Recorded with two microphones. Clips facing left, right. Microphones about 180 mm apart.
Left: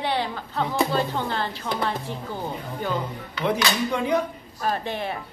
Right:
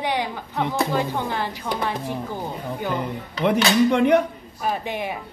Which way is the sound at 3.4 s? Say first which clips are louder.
Right 6 dB; 60° right (ahead or behind).